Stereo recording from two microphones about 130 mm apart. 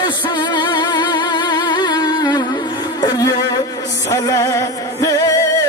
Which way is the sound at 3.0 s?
30° left (ahead or behind).